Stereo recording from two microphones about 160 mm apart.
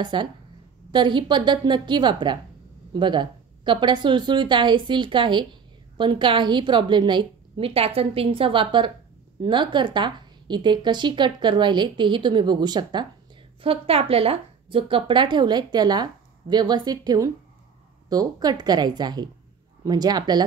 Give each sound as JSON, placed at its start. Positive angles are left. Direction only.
{"t": 0.0, "sound": "a woman's voice", "side_deg": -30}